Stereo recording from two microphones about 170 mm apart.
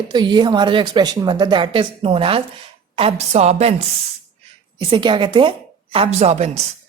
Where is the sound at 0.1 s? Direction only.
25° right (ahead or behind).